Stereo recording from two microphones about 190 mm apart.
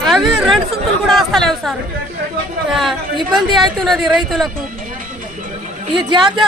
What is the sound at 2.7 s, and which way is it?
Speech, centre (ahead or behind).